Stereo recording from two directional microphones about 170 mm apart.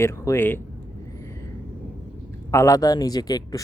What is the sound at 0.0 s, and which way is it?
Speech, 15° left (ahead or behind).